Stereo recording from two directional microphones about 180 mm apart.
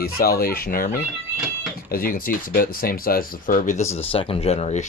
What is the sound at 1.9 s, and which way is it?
Speech, 55° left (ahead or behind).